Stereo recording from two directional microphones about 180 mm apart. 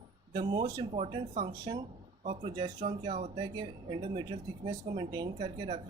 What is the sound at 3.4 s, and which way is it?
A woman's voice, 25° right (ahead or behind).